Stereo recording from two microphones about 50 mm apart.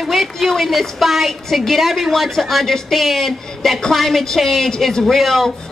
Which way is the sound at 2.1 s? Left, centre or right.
Centre.